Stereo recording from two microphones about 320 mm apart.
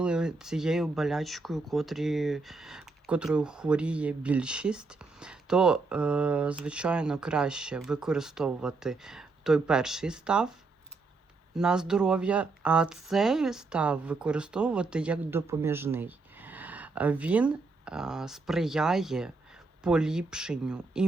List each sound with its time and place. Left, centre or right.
0.0 s speech: centre
11.5 s speech: centre